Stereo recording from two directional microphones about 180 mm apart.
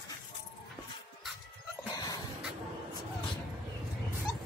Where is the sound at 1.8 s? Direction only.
20° left (ahead or behind).